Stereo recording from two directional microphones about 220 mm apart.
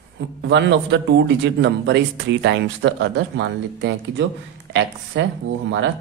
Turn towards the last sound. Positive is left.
turn(degrees=-55)  # may be behind; listen again after turning